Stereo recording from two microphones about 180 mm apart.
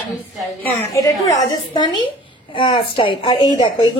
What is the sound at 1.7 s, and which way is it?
A woman's voice, 25° left (ahead or behind).